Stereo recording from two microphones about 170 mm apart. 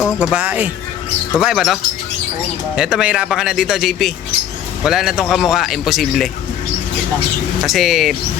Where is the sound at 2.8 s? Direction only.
5° right (ahead or behind).